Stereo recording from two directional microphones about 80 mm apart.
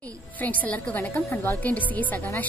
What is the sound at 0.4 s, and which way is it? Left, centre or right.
A woman's voice, left.